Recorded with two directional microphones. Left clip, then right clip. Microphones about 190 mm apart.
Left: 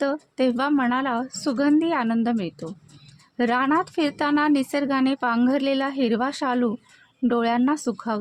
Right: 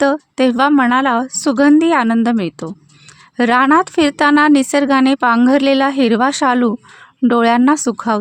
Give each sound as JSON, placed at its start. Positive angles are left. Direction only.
{"t": 0.0, "sound": "speech", "side_deg": -40}